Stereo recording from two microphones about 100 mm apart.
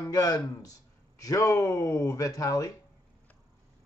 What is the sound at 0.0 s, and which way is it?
Speech, 40° left (ahead or behind).